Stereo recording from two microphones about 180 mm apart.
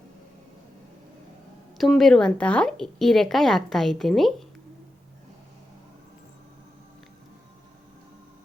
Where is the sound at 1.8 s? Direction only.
Centre (ahead or behind).